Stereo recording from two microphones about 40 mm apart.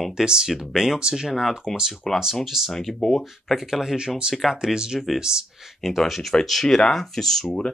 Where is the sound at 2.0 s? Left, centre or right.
Centre.